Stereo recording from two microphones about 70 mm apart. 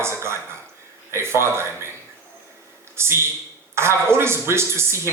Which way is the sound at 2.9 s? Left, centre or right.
Right.